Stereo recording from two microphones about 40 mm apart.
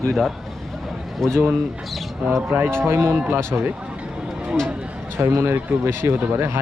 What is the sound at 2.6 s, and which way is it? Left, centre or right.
Speech, right.